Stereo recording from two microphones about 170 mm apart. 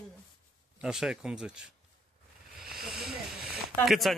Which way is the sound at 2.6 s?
Centre (ahead or behind).